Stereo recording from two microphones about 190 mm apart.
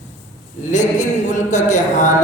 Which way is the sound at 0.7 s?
40° left (ahead or behind).